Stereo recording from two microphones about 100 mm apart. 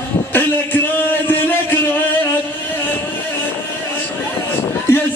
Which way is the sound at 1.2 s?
20° left (ahead or behind).